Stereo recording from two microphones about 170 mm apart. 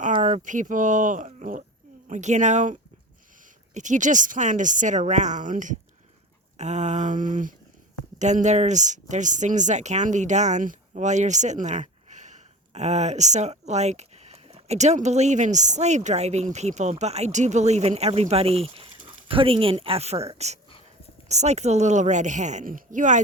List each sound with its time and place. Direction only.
0.0 s speech: 50° right (ahead or behind)
3.8 s a woman's voice: 45° right (ahead or behind)